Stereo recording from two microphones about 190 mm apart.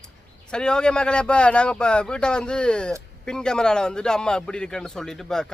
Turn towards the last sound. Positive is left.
turn(degrees=5)  # may be behind; listen again after turning